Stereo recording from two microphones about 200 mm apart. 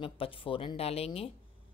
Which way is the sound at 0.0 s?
25° left (ahead or behind).